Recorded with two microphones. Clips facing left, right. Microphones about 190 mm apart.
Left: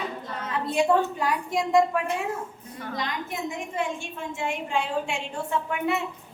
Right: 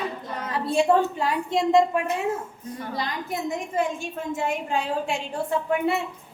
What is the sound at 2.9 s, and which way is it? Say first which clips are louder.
A woman's voice: right 1 dB; 35° right (ahead or behind).